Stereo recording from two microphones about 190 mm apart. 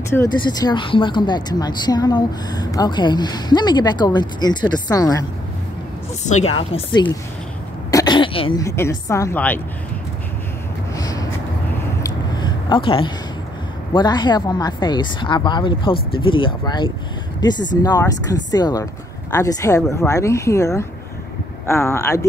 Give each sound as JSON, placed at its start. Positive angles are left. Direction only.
{"t": 0.1, "sound": "speech", "side_deg": 20}
{"t": 6.2, "sound": "speech", "side_deg": 40}
{"t": 6.5, "sound": "speech", "side_deg": 25}
{"t": 11.0, "sound": "a sound", "side_deg": 20}
{"t": 13.9, "sound": "speech", "side_deg": 25}